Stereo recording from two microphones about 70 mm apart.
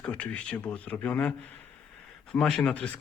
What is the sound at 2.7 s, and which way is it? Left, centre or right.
Speech, centre.